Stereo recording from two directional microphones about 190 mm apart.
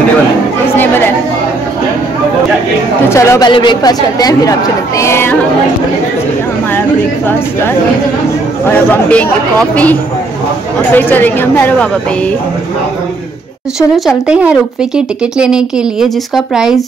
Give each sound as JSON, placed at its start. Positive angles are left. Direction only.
{"t": 0.7, "sound": "chatter", "side_deg": 10}
{"t": 3.1, "sound": "a woman's voice", "side_deg": 15}
{"t": 8.9, "sound": "a woman's voice", "side_deg": 10}
{"t": 10.9, "sound": "a woman's voice", "side_deg": 10}
{"t": 13.7, "sound": "speech", "side_deg": 0}